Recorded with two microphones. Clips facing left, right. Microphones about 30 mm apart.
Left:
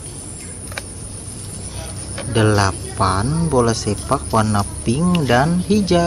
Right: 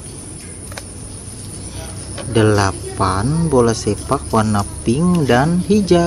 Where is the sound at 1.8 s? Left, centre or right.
Centre.